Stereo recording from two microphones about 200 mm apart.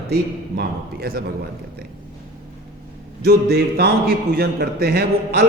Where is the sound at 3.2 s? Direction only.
55° right (ahead or behind).